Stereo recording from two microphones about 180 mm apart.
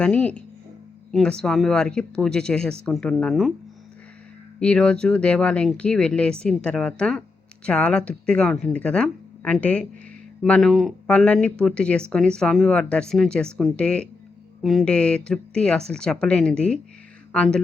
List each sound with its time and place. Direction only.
0.0 s speech: 5° left (ahead or behind)
4.6 s speech: 5° left (ahead or behind)